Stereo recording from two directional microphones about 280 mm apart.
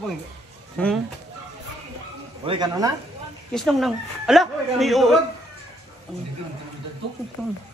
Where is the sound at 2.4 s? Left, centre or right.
Centre.